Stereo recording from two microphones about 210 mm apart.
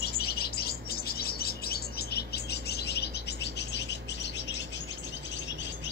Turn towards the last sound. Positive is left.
turn(degrees=55)  # may be behind; listen again after turning